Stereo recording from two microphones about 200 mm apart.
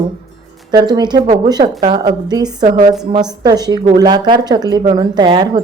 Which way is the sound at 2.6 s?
35° right (ahead or behind).